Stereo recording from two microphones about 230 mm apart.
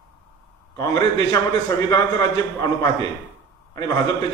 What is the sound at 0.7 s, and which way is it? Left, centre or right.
A man's voice, centre.